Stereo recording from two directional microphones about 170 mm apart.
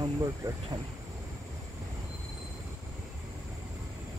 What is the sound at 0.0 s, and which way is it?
Speech, 25° right (ahead or behind).